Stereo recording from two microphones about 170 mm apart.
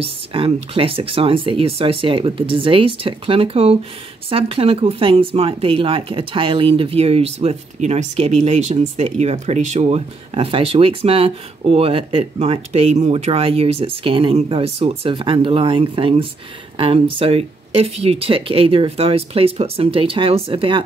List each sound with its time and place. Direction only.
0.0 s speech: 35° right (ahead or behind)